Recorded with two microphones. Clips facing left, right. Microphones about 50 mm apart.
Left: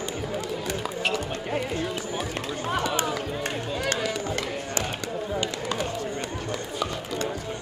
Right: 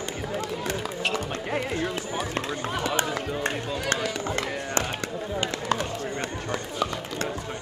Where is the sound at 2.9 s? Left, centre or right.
Right.